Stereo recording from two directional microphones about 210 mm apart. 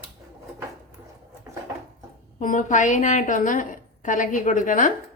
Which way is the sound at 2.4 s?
35° left (ahead or behind).